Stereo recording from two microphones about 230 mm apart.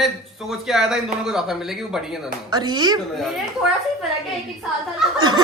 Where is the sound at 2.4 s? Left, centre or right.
Centre.